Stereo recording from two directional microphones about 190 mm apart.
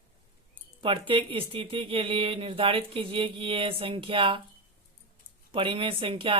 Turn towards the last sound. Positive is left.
turn(degrees=-30)  # may be behind; listen again after turning